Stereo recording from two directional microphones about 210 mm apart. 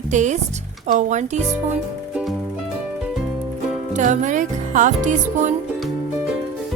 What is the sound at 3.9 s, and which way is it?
Music, 35° right (ahead or behind).